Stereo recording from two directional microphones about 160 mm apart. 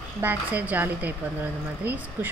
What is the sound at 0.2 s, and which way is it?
Speech, 10° right (ahead or behind).